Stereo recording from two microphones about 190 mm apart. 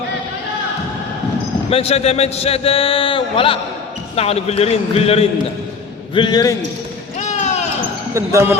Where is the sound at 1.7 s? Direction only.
30° left (ahead or behind).